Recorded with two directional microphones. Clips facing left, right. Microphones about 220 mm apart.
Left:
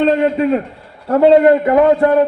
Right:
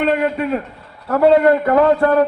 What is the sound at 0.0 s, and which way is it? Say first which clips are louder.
A man's voice: left 4 dB; 30° left (ahead or behind).